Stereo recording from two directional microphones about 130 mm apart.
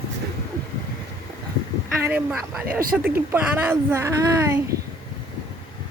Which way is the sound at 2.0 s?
10° right (ahead or behind).